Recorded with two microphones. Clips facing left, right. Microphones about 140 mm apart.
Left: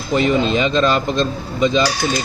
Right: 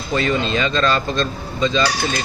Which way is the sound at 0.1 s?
15° left (ahead or behind).